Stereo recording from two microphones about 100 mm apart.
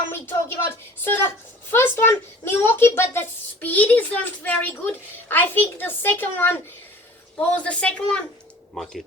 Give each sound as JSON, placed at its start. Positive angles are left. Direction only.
{"t": 0.1, "sound": "a child's voice", "side_deg": 20}